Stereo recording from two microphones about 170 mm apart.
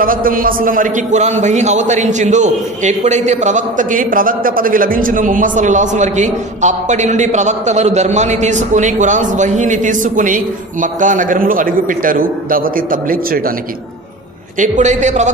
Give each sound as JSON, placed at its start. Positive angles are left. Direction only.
{"t": 0.0, "sound": "a man's voice", "side_deg": -55}
{"t": 14.6, "sound": "a man's voice", "side_deg": -45}